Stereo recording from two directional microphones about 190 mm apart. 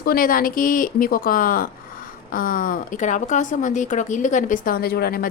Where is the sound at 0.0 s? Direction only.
50° left (ahead or behind).